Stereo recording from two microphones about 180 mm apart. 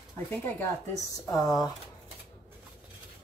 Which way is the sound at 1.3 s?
20° left (ahead or behind).